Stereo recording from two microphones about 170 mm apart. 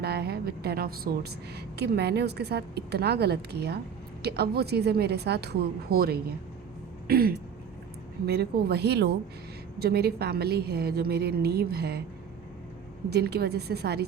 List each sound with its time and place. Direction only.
0.0 s a woman's voice: 70° right (ahead or behind)
7.1 s a sound: 60° right (ahead or behind)
8.3 s a woman's voice: 65° right (ahead or behind)
9.7 s a woman's voice: 65° right (ahead or behind)
13.1 s a woman's voice: 70° right (ahead or behind)